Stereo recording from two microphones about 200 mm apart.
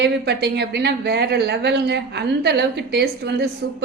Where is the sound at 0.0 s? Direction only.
55° right (ahead or behind).